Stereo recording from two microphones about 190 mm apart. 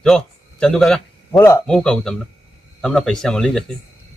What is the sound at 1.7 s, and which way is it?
Speech, 5° left (ahead or behind).